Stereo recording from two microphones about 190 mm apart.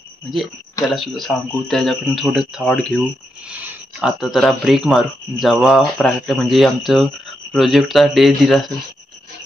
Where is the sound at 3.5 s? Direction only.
5° right (ahead or behind).